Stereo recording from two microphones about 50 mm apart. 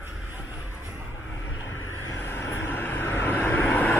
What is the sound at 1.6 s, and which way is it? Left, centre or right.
Vehicle, left.